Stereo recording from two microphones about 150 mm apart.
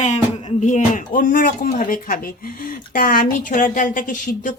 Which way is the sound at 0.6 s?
55° left (ahead or behind).